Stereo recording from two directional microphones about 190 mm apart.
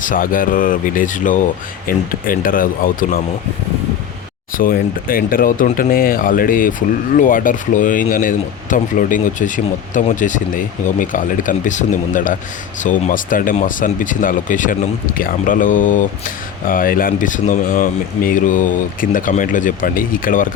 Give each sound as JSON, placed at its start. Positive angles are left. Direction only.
{"t": 0.0, "sound": "speech", "side_deg": 45}
{"t": 4.5, "sound": "speech", "side_deg": 50}